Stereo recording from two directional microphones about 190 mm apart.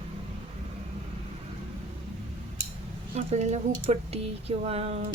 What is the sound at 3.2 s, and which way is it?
Speech, 35° right (ahead or behind).